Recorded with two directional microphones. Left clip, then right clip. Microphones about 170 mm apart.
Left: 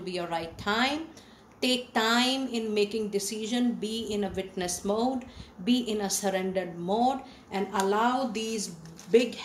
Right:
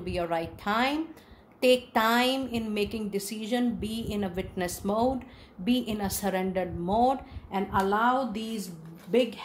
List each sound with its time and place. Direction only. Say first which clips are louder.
0.0 s a woman's voice: right 2 dB; 50° right (ahead or behind)